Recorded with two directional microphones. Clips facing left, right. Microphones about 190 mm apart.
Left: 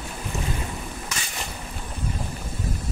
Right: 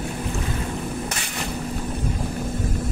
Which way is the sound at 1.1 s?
55° right (ahead or behind).